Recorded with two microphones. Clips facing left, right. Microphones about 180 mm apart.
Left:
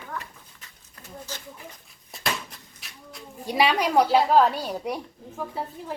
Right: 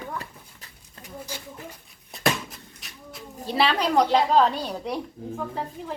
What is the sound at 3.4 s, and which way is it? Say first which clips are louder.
A child's voice: left 1 dB; 10° left (ahead or behind).